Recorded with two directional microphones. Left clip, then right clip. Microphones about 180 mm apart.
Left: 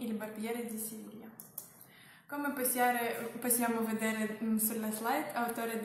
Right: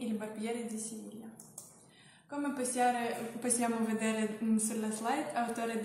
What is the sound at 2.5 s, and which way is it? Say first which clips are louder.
Speech: even; 20° left (ahead or behind).